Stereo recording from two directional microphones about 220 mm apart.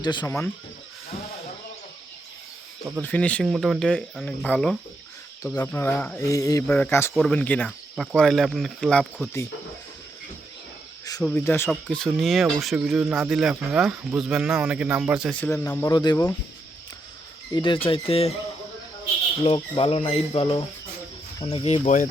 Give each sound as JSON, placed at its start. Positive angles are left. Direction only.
{"t": 0.0, "sound": "speech", "side_deg": 20}
{"t": 3.0, "sound": "speech", "side_deg": 5}
{"t": 11.2, "sound": "speech", "side_deg": 10}
{"t": 17.5, "sound": "speech", "side_deg": 20}
{"t": 19.5, "sound": "speech", "side_deg": 25}